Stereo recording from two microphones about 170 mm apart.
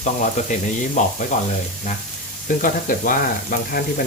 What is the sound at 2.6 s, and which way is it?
Speech, 50° left (ahead or behind).